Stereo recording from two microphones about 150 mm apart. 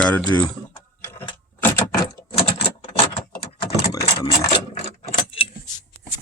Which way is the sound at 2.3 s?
40° left (ahead or behind).